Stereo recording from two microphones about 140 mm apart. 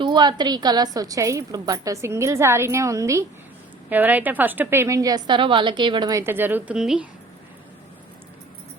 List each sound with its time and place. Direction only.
0.0 s a woman's voice: 30° right (ahead or behind)
3.8 s a woman's voice: 10° right (ahead or behind)